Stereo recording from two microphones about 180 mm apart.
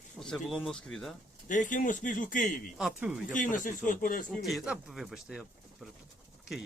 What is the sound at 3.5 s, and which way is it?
Speech, 45° left (ahead or behind).